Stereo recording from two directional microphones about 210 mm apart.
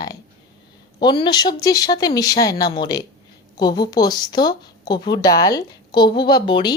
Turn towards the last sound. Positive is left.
turn(degrees=20)  # may be behind; listen again after turning